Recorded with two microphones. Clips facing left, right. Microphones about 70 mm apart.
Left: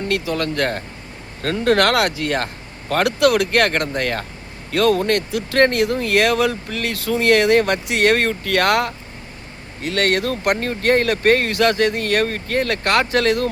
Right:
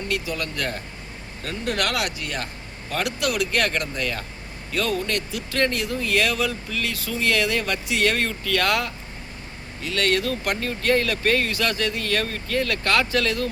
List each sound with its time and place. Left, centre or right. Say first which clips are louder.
0.1 s speech: left 6 dB; left
1.4 s a man's voice: left 10 dB; left
4.7 s speech: left 8 dB; left